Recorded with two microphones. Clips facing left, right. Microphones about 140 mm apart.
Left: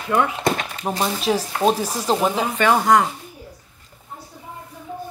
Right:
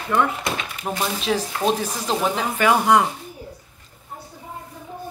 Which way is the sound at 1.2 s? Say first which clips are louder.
Left 3 dB; 10° left (ahead or behind).